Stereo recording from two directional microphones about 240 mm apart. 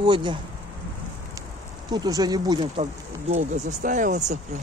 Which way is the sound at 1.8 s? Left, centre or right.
Centre.